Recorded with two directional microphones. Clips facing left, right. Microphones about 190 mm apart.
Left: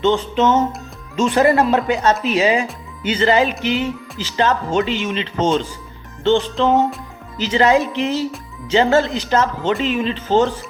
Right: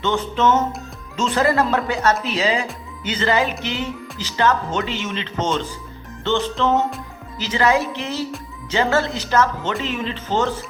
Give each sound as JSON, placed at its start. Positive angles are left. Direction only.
{"t": 0.0, "sound": "speech", "side_deg": 15}